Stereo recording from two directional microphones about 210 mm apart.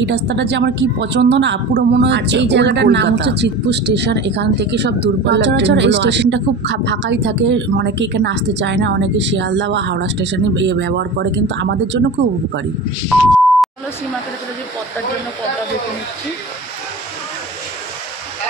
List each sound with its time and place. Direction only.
0.0 s a woman's voice: 55° right (ahead or behind)